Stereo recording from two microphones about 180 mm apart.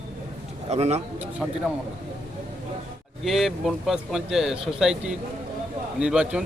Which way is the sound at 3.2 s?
Centre (ahead or behind).